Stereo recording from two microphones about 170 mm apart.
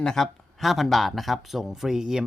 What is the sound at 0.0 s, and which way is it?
Speech, centre (ahead or behind).